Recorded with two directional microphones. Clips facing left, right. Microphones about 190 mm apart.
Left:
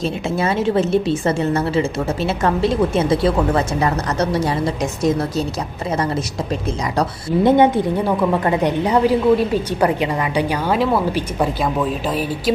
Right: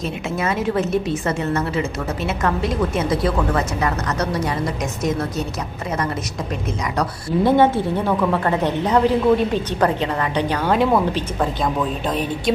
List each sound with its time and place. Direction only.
0.3 s a woman's voice: 30° left (ahead or behind)
6.9 s a woman's voice: 25° left (ahead or behind); by 12.2 s 5° left (ahead or behind)